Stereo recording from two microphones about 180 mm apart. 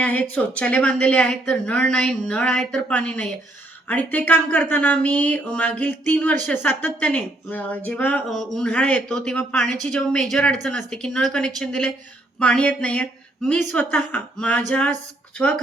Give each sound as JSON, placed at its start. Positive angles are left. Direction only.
{"t": 0.0, "sound": "speech", "side_deg": 10}